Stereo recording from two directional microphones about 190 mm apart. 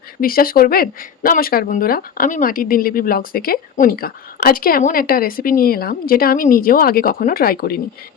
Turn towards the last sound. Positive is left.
turn(degrees=50)  # may be behind; listen again after turning